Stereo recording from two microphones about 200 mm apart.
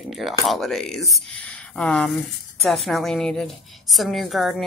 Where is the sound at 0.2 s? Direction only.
Centre (ahead or behind).